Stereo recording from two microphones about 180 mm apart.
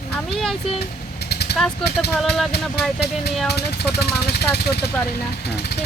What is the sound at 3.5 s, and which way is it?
Speech, 65° left (ahead or behind).